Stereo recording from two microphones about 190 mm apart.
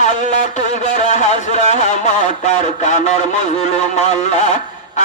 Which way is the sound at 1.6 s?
40° left (ahead or behind).